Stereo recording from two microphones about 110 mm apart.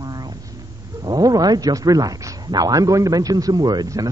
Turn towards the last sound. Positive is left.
turn(degrees=-35)  # may be behind; listen again after turning